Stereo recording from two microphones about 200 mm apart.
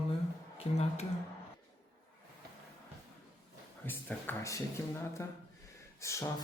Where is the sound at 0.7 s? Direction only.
35° left (ahead or behind).